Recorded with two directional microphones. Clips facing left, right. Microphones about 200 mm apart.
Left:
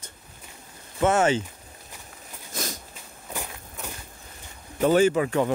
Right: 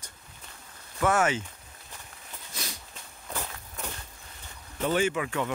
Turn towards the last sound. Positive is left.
turn(degrees=35)  # may be behind; listen again after turning